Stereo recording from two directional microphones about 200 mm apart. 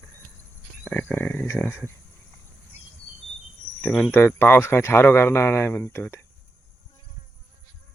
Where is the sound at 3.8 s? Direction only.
5° left (ahead or behind).